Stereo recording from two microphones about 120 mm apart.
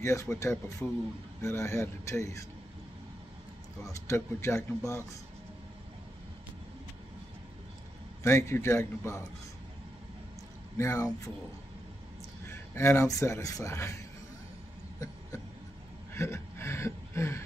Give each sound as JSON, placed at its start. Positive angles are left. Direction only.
{"t": 0.0, "sound": "speech", "side_deg": 25}
{"t": 3.8, "sound": "speech", "side_deg": 25}
{"t": 8.2, "sound": "speech", "side_deg": 20}
{"t": 10.8, "sound": "speech", "side_deg": 25}
{"t": 12.4, "sound": "speech", "side_deg": 20}
{"t": 16.1, "sound": "a sound", "side_deg": 20}